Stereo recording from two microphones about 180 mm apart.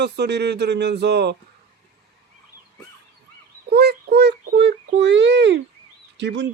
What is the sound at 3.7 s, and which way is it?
Child singing, 65° right (ahead or behind).